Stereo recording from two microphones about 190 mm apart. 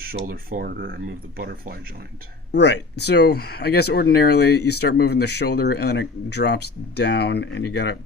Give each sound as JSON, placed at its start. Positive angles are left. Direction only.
{"t": 0.0, "sound": "speech", "side_deg": -50}
{"t": 2.5, "sound": "speech", "side_deg": 65}